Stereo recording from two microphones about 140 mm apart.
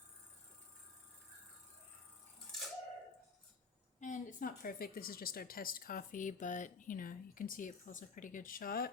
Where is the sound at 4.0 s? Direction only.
70° left (ahead or behind); by 8.8 s 90° left.